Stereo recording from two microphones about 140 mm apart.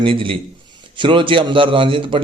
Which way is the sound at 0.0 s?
40° right (ahead or behind).